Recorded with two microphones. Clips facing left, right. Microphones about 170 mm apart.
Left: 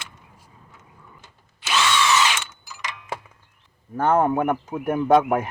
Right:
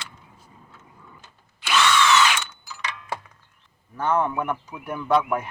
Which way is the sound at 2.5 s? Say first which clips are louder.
Right 1 dB; 10° left (ahead or behind).